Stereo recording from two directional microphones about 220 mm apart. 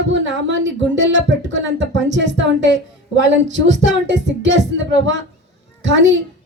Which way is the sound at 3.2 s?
55° right (ahead or behind).